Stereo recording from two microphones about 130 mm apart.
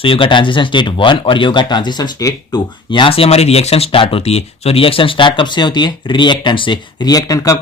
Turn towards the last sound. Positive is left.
turn(degrees=25)  # may be behind; listen again after turning